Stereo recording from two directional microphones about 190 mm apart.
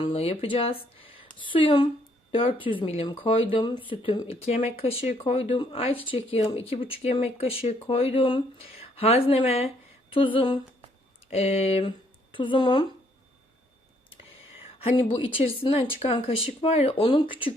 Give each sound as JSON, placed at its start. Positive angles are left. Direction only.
{"t": 0.0, "sound": "speech", "side_deg": 30}
{"t": 14.8, "sound": "speech", "side_deg": 30}